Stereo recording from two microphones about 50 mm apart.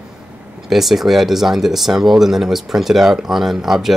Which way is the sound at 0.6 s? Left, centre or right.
Centre.